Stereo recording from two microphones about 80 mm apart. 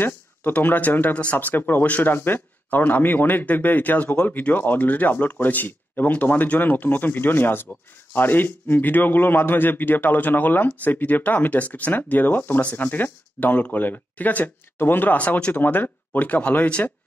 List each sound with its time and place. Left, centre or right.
0.0 s a man's voice: left